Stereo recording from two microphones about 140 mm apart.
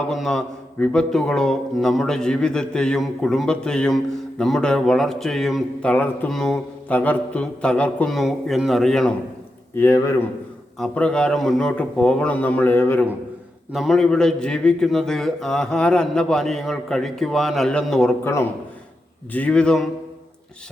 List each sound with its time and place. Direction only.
0.0 s a man's voice: centre (ahead or behind)
9.7 s a man's voice: 20° left (ahead or behind)
10.8 s a man's voice: 5° left (ahead or behind)
13.7 s a man's voice: centre (ahead or behind)
18.2 s a man's voice: 20° left (ahead or behind)
19.3 s a man's voice: 10° left (ahead or behind)